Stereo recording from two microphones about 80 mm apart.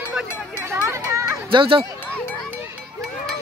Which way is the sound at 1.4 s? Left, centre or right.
Right.